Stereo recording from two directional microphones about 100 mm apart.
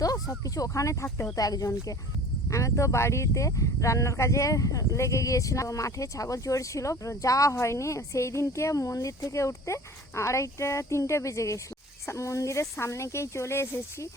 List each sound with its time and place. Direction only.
0.0 s speech: 35° left (ahead or behind)
1.0 s speech: 20° left (ahead or behind)
1.4 s speech: 35° left (ahead or behind)